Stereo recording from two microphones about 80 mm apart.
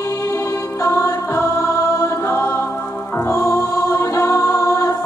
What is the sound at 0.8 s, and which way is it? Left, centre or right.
Music, left.